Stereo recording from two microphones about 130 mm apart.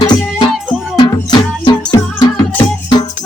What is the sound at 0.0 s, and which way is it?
Music, 35° left (ahead or behind).